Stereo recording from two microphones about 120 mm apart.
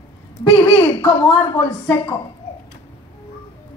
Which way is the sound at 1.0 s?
15° left (ahead or behind).